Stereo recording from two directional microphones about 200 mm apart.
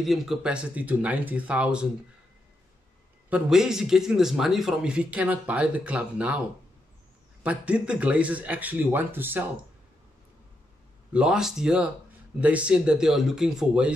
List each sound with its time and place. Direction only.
0.0 s a man's voice: centre (ahead or behind)
3.3 s a man's voice: 5° right (ahead or behind)
7.4 s speech: 5° right (ahead or behind)
11.1 s a man's voice: 5° right (ahead or behind)